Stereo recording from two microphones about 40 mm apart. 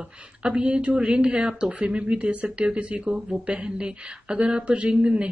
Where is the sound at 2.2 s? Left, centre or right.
Right.